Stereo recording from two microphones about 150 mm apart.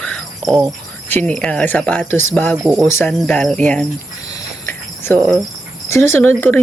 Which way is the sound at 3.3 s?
5° left (ahead or behind).